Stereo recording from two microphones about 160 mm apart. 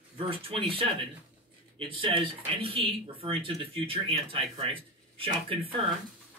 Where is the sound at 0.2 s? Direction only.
35° right (ahead or behind).